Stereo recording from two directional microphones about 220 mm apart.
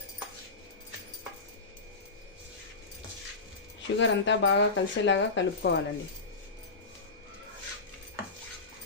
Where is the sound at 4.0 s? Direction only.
55° left (ahead or behind).